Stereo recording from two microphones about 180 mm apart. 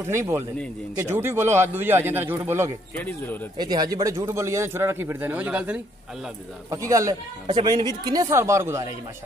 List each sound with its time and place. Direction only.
0.1 s speech: 15° right (ahead or behind)
3.0 s speech: 10° left (ahead or behind)
3.5 s speech: 25° right (ahead or behind)